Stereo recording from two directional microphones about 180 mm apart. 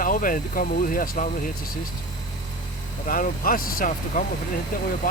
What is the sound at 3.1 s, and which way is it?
Speech, 50° left (ahead or behind).